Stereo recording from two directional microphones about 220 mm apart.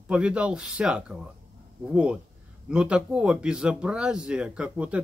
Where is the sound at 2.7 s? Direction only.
5° right (ahead or behind).